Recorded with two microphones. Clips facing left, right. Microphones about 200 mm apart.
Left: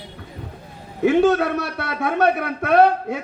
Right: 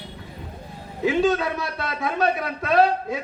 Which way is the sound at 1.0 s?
65° left (ahead or behind).